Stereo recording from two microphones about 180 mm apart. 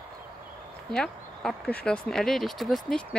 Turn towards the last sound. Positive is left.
turn(degrees=0)  # may be behind; listen again after turning